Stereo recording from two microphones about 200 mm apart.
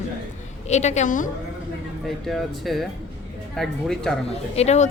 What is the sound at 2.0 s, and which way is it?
Speech, centre (ahead or behind).